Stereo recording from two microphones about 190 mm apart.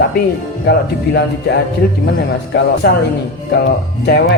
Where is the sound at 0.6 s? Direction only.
60° left (ahead or behind).